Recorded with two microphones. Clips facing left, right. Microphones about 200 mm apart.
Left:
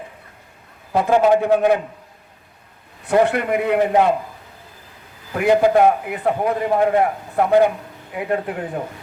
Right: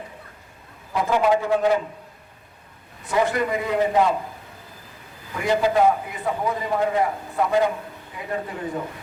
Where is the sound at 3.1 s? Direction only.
65° left (ahead or behind).